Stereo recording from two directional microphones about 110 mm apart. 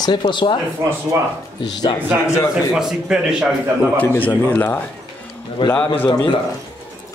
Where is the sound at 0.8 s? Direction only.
25° right (ahead or behind).